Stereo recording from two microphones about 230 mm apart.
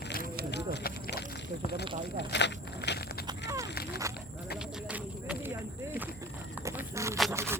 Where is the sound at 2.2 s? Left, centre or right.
Left.